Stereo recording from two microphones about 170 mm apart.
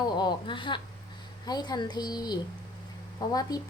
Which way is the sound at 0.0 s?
25° left (ahead or behind).